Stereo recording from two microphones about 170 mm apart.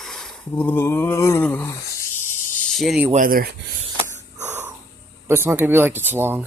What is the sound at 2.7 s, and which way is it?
Speech, centre (ahead or behind).